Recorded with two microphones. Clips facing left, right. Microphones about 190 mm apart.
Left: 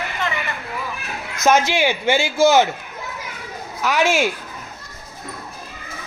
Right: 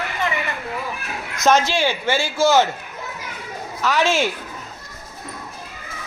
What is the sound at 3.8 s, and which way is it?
Speech, 15° left (ahead or behind).